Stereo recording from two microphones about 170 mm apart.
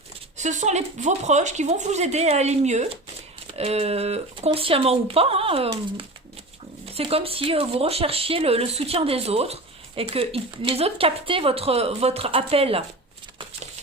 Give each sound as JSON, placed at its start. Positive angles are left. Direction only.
{"t": 0.3, "sound": "speech", "side_deg": -45}